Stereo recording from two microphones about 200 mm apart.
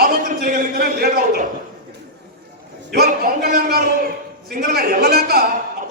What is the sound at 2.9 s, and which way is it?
A man's voice, 50° right (ahead or behind).